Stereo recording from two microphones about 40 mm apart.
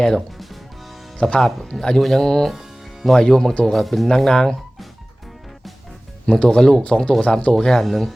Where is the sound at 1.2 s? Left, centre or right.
Centre.